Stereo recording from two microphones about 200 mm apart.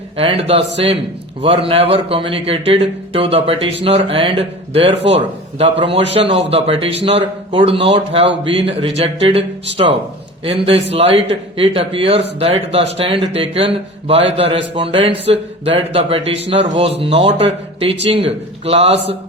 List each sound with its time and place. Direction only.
0.2 s a man's voice: 30° right (ahead or behind)
7.7 s speech: 65° right (ahead or behind)
8.4 s a man's voice: 30° right (ahead or behind)